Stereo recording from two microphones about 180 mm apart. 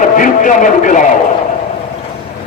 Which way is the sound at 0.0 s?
45° left (ahead or behind).